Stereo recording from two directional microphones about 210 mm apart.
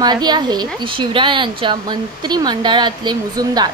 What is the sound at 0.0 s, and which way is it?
Speech, 20° right (ahead or behind).